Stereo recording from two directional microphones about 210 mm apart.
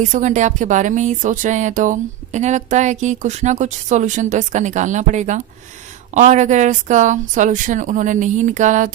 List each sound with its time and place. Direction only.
0.0 s speech: 35° right (ahead or behind)